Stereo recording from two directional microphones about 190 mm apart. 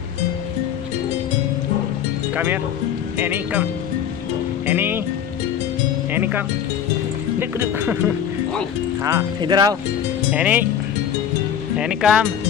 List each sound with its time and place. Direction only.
2.3 s speech: 10° right (ahead or behind)
4.6 s speech: 10° right (ahead or behind)
6.1 s speech: 10° right (ahead or behind)
9.0 s speech: 20° right (ahead or behind)
10.3 s speech: 10° right (ahead or behind)
11.7 s speech: 5° right (ahead or behind)